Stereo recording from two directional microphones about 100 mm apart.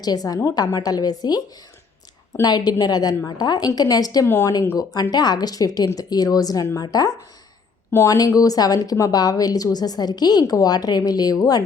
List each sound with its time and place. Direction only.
0.0 s speech: 40° left (ahead or behind)
2.4 s speech: 40° left (ahead or behind)
4.3 s speech: 25° left (ahead or behind)
5.1 s speech: 45° left (ahead or behind)
7.9 s speech: 25° left (ahead or behind)
8.1 s speech: 35° left (ahead or behind)